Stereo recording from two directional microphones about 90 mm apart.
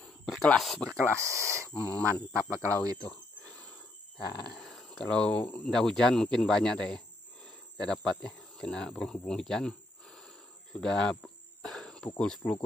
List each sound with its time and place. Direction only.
0.0 s a sound: 5° left (ahead or behind)
0.7 s speech: 15° left (ahead or behind)
1.3 s speech: 35° right (ahead or behind)
1.7 s speech: 15° left (ahead or behind)
2.5 s speech: 40° right (ahead or behind)
3.0 s cricket: 15° left (ahead or behind)
4.6 s a sound: 5° left (ahead or behind)
5.4 s speech: 15° left (ahead or behind)
5.7 s speech: 5° left (ahead or behind)
11.6 s cricket: 10° left (ahead or behind)
12.2 s speech: 10° left (ahead or behind)